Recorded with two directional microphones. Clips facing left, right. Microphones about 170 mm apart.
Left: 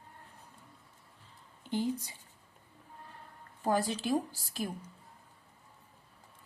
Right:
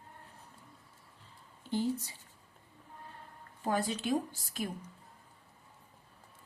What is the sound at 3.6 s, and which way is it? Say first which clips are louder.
Speech: left 2 dB; 35° left (ahead or behind).